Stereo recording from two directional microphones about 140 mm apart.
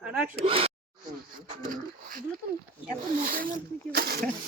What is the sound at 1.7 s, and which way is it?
Speech, 80° right.